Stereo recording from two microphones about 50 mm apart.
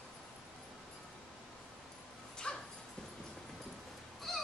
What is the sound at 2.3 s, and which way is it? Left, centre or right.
Dog, centre.